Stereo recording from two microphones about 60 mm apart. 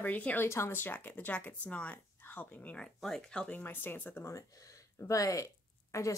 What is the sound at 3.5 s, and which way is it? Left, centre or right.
Speech, left.